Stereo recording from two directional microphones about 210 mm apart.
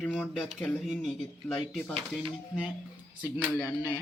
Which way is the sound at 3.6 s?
15° left (ahead or behind).